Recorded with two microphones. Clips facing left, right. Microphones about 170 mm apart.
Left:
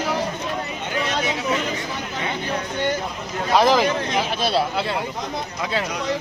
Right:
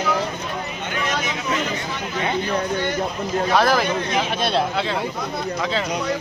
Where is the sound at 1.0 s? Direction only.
30° left (ahead or behind).